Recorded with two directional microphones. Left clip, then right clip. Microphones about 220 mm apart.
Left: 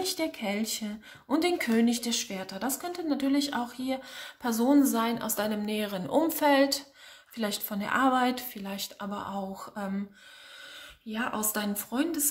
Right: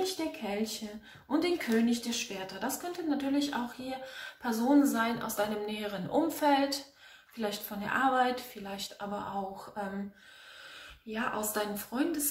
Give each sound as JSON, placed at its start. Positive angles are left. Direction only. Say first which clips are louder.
{"t": 0.0, "sound": "a woman's voice", "louder": "left 3 dB", "side_deg": 50}
{"t": 11.1, "sound": "a woman's voice", "louder": "left 1 dB", "side_deg": 50}